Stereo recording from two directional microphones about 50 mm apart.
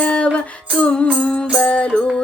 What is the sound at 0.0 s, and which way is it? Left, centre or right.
Music, left.